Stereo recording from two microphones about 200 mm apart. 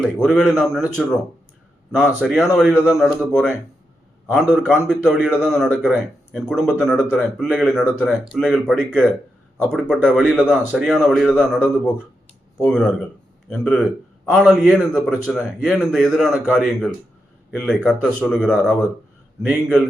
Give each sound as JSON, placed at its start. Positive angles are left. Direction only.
{"t": 0.0, "sound": "speech", "side_deg": 0}